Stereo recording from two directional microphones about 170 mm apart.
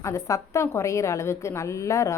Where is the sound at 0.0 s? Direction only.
20° left (ahead or behind).